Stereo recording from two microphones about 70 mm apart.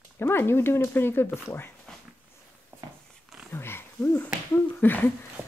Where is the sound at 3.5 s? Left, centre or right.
Left.